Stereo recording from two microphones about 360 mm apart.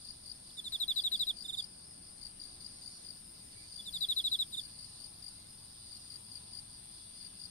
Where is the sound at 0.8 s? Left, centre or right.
Centre.